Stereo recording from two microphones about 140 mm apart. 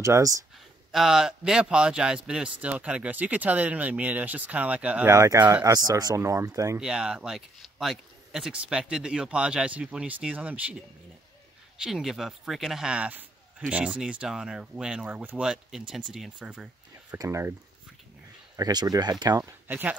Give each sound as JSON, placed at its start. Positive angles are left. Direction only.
{"t": 0.0, "sound": "speech", "side_deg": -20}
{"t": 0.9, "sound": "a man's voice", "side_deg": -5}
{"t": 5.1, "sound": "speech", "side_deg": -20}
{"t": 6.8, "sound": "speech", "side_deg": -5}
{"t": 11.8, "sound": "a man's voice", "side_deg": 0}
{"t": 17.2, "sound": "speech", "side_deg": -20}
{"t": 18.6, "sound": "speech", "side_deg": -30}
{"t": 19.7, "sound": "a man's voice", "side_deg": -10}